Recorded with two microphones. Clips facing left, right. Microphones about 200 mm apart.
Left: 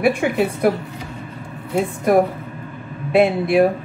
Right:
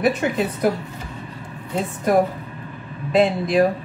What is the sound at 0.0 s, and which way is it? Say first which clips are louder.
Speech: left 2 dB; 10° left (ahead or behind).